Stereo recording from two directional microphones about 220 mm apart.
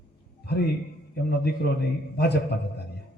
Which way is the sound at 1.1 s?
45° left (ahead or behind).